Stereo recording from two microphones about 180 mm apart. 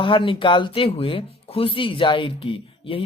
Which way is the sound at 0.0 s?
30° left (ahead or behind).